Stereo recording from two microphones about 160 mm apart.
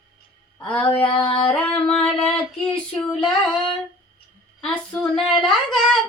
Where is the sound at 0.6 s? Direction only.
5° left (ahead or behind).